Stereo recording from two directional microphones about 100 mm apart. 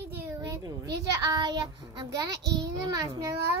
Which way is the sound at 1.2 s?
40° right (ahead or behind).